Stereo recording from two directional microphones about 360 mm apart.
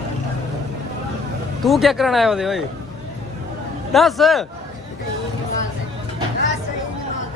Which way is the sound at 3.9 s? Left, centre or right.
Centre.